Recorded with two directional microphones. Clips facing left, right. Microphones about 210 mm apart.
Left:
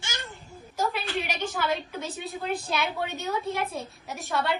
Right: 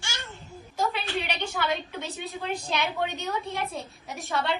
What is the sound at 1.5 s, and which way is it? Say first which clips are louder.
A woman's voice: even; centre (ahead or behind).